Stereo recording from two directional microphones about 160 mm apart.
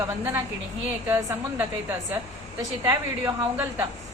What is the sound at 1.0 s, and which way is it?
A woman's voice, 10° right (ahead or behind).